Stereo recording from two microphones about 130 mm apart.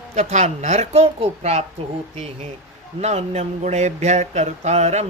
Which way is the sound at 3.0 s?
55° right (ahead or behind).